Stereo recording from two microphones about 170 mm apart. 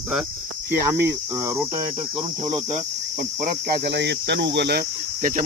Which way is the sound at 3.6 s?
85° right.